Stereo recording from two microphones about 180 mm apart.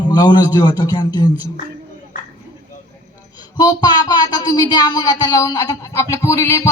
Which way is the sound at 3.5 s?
25° left (ahead or behind).